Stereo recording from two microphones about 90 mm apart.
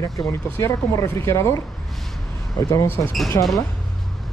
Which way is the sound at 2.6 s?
40° left (ahead or behind).